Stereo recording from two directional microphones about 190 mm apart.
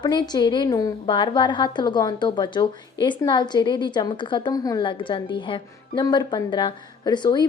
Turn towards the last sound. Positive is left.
turn(degrees=25)  # may be behind; listen again after turning